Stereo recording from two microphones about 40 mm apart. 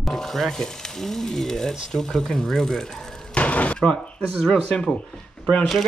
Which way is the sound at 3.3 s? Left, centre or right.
Left.